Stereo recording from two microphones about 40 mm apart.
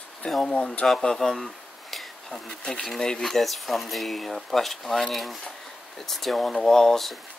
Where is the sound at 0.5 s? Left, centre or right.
Left.